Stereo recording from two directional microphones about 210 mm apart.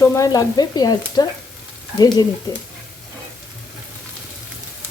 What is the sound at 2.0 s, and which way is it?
Speech, 20° left (ahead or behind).